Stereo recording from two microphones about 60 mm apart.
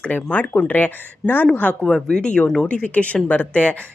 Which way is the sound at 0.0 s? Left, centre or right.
Left.